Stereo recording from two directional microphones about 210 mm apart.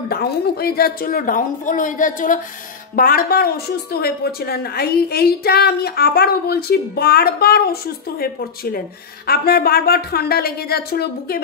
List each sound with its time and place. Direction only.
0.1 s a woman's voice: 50° left (ahead or behind)